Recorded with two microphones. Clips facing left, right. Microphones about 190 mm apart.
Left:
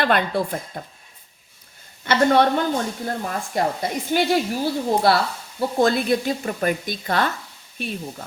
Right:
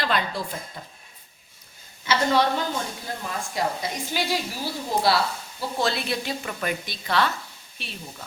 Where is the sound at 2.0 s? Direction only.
55° left (ahead or behind).